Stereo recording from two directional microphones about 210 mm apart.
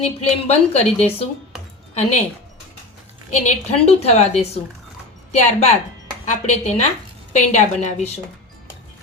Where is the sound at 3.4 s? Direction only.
30° left (ahead or behind).